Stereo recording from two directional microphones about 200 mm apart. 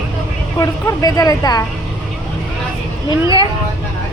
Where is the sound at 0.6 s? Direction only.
15° left (ahead or behind).